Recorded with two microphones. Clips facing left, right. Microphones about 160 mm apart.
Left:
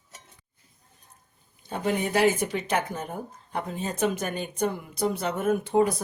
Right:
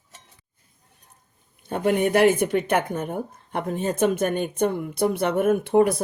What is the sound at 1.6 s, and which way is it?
Speech, 55° right (ahead or behind).